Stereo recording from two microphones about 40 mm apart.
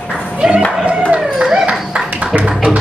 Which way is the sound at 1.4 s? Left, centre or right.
Right.